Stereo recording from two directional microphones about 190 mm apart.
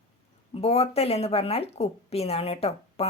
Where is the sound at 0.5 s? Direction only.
35° left (ahead or behind).